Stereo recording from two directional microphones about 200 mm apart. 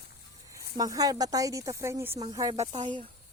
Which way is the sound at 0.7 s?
20° right (ahead or behind).